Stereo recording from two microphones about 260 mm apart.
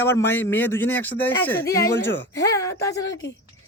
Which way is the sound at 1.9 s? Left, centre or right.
Left.